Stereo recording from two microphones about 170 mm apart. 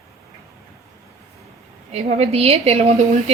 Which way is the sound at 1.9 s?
40° right (ahead or behind).